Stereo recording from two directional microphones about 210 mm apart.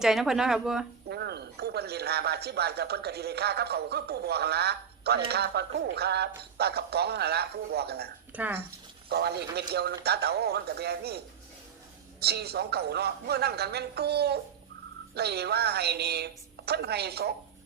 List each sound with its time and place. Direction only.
0.0 s speech: centre (ahead or behind)
1.1 s speech: 50° right (ahead or behind)
8.3 s speech: 10° right (ahead or behind)
9.0 s speech: 50° right (ahead or behind)
12.2 s speech: 50° right (ahead or behind)